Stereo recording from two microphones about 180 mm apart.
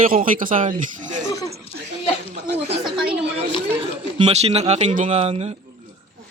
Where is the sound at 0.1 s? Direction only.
50° right (ahead or behind).